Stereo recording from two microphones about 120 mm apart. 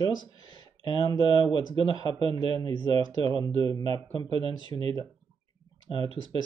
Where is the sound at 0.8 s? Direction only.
40° left (ahead or behind).